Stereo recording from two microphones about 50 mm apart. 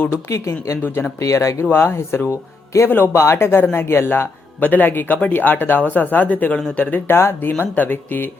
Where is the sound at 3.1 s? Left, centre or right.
Left.